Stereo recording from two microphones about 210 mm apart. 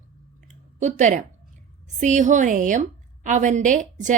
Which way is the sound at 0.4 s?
35° right (ahead or behind).